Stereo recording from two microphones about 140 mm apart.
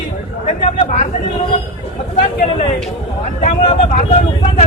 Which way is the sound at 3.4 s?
55° left (ahead or behind).